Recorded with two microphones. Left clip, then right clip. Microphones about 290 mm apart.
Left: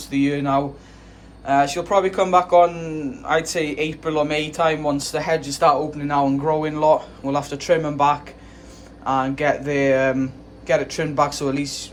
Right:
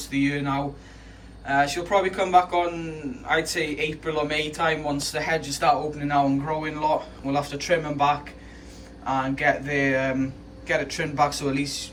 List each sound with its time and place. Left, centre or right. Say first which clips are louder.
0.1 s a man's voice: left 6 dB; centre